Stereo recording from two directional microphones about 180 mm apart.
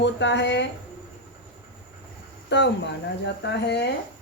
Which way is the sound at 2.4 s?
75° left (ahead or behind).